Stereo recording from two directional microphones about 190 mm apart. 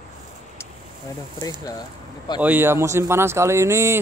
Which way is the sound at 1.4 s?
20° left (ahead or behind).